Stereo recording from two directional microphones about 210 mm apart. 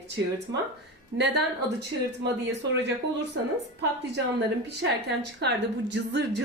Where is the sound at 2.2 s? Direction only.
55° right (ahead or behind).